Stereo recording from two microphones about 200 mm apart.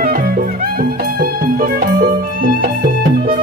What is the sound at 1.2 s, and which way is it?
Music, 45° right (ahead or behind).